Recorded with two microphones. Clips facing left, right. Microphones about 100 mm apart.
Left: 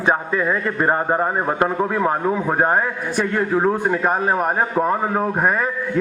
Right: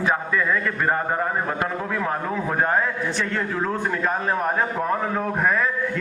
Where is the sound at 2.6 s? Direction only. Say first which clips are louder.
Left 1 dB; 45° left (ahead or behind).